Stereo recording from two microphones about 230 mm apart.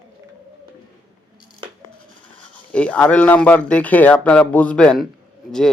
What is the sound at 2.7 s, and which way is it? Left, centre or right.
A man's voice, centre.